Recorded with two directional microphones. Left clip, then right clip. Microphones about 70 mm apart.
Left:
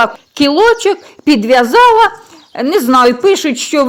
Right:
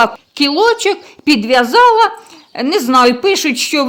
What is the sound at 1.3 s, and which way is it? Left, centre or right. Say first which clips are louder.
Speech: left 2 dB; left.